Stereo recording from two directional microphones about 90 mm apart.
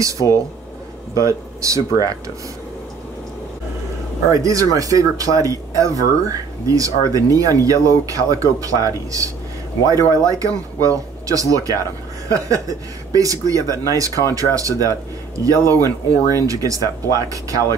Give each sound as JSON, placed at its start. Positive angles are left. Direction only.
{"t": 1.2, "sound": "speech", "side_deg": -40}
{"t": 4.3, "sound": "speech", "side_deg": -40}